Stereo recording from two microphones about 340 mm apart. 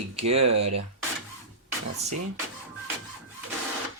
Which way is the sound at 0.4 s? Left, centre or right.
Right.